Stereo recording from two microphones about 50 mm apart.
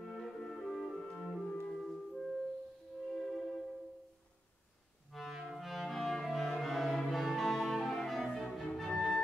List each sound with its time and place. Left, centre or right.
0.0 s music: centre
1.5 s music: centre
1.8 s music: centre
3.1 s music: centre
5.1 s accordion: centre
5.4 s music: centre
5.7 s music: centre
6.2 s cello: centre
7.0 s music: centre